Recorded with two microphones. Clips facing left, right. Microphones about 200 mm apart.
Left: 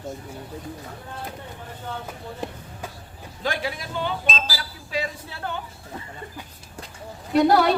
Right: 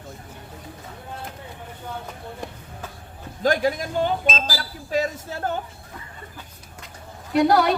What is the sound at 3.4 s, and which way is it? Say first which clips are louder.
Speech: right 7 dB; 45° right (ahead or behind).